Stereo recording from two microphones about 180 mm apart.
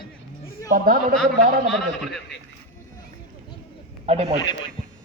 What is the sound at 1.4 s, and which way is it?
Speech, 45° right (ahead or behind).